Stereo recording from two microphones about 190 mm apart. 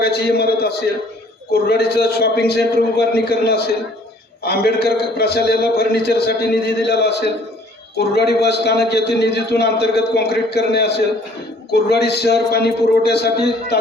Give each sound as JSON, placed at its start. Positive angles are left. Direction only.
{"t": 0.0, "sound": "a man's voice", "side_deg": 55}
{"t": 2.0, "sound": "a man's voice", "side_deg": 55}